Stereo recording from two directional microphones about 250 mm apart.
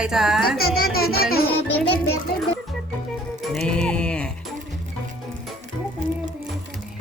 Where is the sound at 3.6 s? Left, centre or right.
Centre.